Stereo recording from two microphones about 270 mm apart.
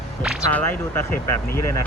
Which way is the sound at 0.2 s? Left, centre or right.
Centre.